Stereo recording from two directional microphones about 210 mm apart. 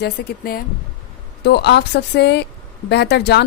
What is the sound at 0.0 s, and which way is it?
A woman's voice, 45° left (ahead or behind).